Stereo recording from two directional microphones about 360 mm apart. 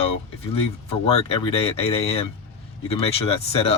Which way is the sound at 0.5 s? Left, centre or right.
Centre.